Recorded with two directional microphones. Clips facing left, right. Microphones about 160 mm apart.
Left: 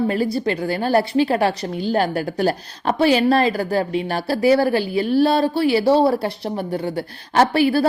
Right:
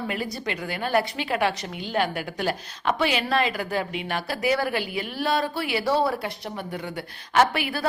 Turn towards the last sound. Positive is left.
turn(degrees=30)  # may be behind; listen again after turning